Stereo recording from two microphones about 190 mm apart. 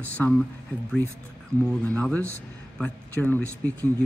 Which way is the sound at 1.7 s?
5° left (ahead or behind).